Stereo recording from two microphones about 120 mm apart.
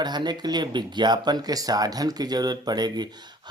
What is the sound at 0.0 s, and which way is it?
Speech, 35° right (ahead or behind).